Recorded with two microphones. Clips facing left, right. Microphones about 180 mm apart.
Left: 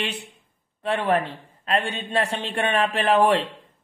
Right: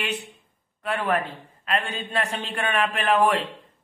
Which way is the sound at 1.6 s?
35° left (ahead or behind).